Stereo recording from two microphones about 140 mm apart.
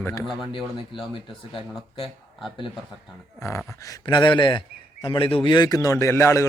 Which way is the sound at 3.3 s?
20° left (ahead or behind).